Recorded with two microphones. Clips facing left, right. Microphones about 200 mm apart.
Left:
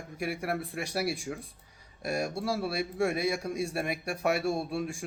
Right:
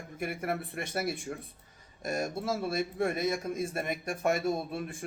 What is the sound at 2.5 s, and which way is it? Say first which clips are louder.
A man's voice: even; 5° left (ahead or behind).